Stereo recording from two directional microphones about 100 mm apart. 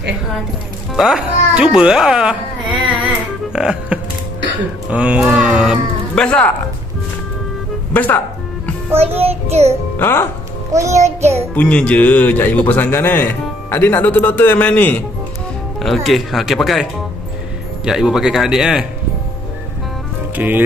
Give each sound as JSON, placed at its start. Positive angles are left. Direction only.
{"t": 0.9, "sound": "speech", "side_deg": 0}
{"t": 3.5, "sound": "speech", "side_deg": -5}
{"t": 6.1, "sound": "speech", "side_deg": 10}
{"t": 7.9, "sound": "speech", "side_deg": 15}
{"t": 8.9, "sound": "music", "side_deg": -90}
{"t": 9.9, "sound": "speech", "side_deg": 25}
{"t": 10.7, "sound": "music", "side_deg": -30}
{"t": 11.5, "sound": "speech", "side_deg": 15}
{"t": 15.8, "sound": "speech", "side_deg": 0}
{"t": 17.8, "sound": "speech", "side_deg": -5}
{"t": 20.3, "sound": "speech", "side_deg": -20}